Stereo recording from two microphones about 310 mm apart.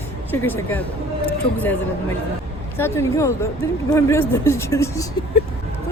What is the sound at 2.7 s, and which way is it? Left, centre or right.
Speech, centre.